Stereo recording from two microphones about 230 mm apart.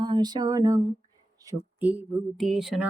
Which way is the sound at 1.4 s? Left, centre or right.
Centre.